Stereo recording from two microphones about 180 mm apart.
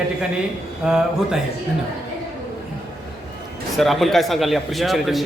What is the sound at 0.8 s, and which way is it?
Speech, 5° right (ahead or behind).